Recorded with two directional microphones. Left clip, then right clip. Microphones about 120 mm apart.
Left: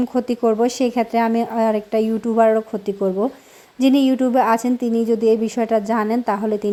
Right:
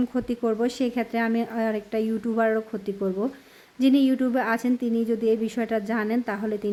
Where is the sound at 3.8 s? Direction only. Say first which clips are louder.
Left 5 dB; 30° left (ahead or behind).